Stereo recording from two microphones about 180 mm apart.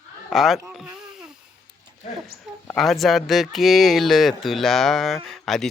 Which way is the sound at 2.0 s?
40° left (ahead or behind).